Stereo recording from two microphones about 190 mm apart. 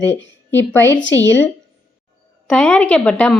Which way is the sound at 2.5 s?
5° left (ahead or behind).